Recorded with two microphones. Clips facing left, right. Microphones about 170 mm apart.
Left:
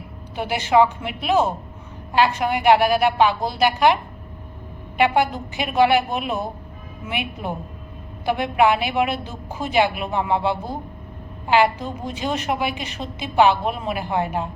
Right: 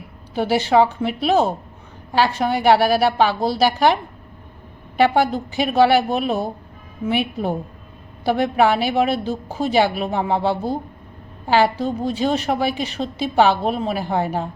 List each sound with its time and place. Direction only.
0.3 s a woman's voice: 35° right (ahead or behind)
4.9 s a woman's voice: 35° right (ahead or behind)